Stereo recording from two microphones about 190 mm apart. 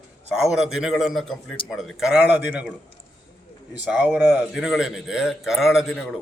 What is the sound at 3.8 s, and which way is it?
A man's voice, 5° right (ahead or behind).